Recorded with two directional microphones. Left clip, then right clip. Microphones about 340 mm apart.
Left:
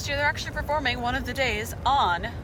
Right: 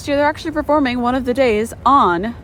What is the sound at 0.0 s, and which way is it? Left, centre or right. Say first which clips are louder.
Speech: right 9 dB; centre.